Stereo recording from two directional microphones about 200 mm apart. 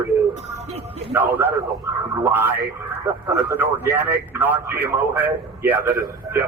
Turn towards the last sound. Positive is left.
turn(degrees=-15)  # may be behind; listen again after turning